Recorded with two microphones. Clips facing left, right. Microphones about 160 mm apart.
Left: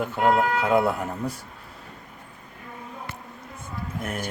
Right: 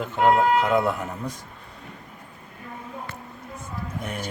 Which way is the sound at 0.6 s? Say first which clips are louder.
Left 1 dB; 10° left (ahead or behind).